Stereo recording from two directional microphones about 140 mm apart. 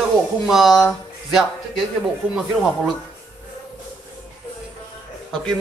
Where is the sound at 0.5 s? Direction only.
Centre (ahead or behind).